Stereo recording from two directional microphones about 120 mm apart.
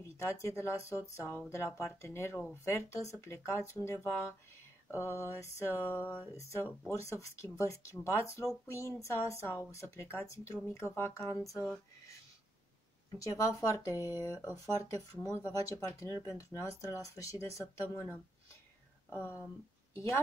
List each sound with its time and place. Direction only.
0.0 s speech: 25° left (ahead or behind)
13.2 s speech: 25° left (ahead or behind)